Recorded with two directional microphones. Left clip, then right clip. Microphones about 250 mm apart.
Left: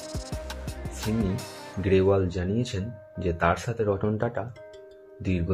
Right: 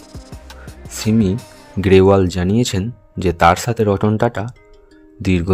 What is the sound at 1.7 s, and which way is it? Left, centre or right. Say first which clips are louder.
Speech: right 11 dB; right.